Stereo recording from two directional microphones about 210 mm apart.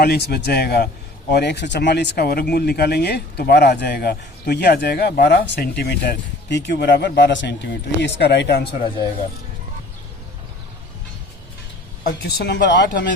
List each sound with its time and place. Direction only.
0.0 s speech: 50° left (ahead or behind)
12.0 s speech: 50° left (ahead or behind)